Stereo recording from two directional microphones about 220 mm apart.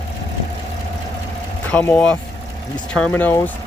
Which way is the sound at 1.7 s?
5° left (ahead or behind).